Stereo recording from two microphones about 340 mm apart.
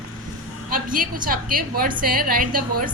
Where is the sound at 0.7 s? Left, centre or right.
Right.